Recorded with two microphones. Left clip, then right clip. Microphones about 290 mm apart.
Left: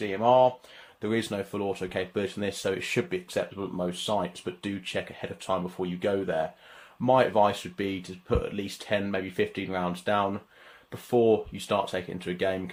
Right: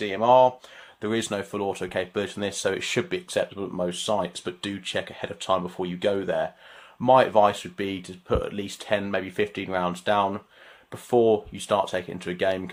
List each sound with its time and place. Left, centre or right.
0.0 s speech: right
1.0 s speech: right